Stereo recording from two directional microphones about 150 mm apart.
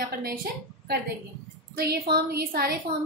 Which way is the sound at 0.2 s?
85° right.